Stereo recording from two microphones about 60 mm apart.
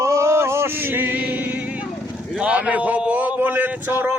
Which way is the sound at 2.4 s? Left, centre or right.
Right.